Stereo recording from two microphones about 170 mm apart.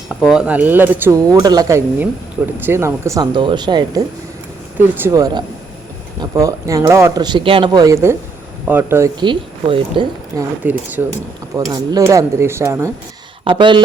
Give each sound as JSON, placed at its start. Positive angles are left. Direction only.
{"t": 0.3, "sound": "speech", "side_deg": -5}
{"t": 1.4, "sound": "speech", "side_deg": -25}
{"t": 9.2, "sound": "speech", "side_deg": -30}
{"t": 10.6, "sound": "speech", "side_deg": -10}
{"t": 11.5, "sound": "speech", "side_deg": -20}
{"t": 13.4, "sound": "speech", "side_deg": -30}